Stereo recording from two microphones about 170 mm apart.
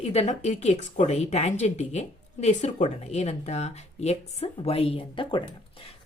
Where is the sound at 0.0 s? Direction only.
40° left (ahead or behind).